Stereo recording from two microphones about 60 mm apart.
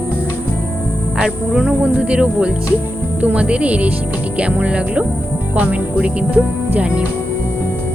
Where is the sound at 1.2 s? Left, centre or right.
Centre.